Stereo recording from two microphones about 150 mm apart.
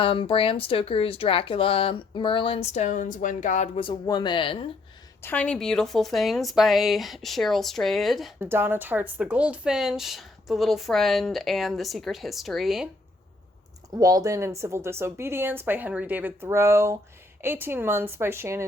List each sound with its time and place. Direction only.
0.0 s speech: 35° left (ahead or behind); by 3.7 s 55° left (ahead or behind)
4.0 s speech: 30° left (ahead or behind)
5.2 s speech: 10° left (ahead or behind)
8.4 s speech: 15° right (ahead or behind)
13.9 s a woman's voice: 25° right (ahead or behind)